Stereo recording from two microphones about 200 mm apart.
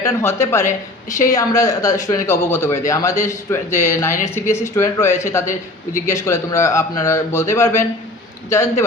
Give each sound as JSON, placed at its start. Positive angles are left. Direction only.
{"t": 0.0, "sound": "speech", "side_deg": 15}